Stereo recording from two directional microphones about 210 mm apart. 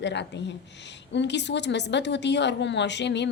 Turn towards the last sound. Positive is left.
turn(degrees=55)  # may be behind; listen again after turning